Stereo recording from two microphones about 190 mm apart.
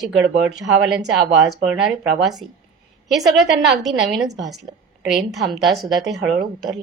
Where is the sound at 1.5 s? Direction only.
Centre (ahead or behind).